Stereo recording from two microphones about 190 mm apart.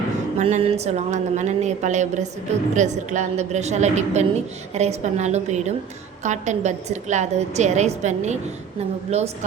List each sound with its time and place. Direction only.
0.3 s a woman's voice: 35° right (ahead or behind)